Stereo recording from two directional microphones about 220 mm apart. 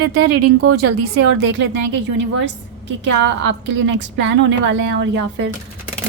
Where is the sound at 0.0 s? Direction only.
90° right.